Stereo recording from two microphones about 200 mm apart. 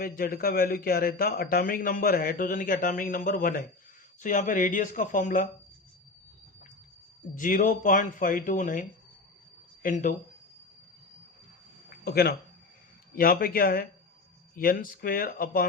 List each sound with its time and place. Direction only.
0.0 s a man's voice: 50° left (ahead or behind)
7.3 s speech: 40° left (ahead or behind)
11.9 s a sound: 50° left (ahead or behind)
13.1 s a man's voice: 45° left (ahead or behind)